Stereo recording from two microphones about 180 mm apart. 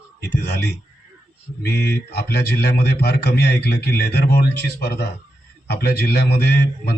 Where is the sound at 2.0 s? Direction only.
65° left (ahead or behind).